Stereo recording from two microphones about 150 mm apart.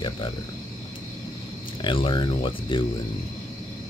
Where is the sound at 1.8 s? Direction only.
35° left (ahead or behind).